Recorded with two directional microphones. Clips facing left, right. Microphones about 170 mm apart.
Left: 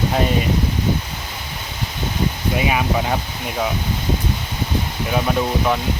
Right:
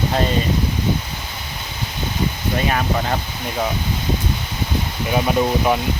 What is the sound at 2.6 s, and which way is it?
Speech, 10° left (ahead or behind).